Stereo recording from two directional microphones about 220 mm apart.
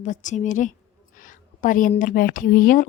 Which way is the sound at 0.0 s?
35° left (ahead or behind).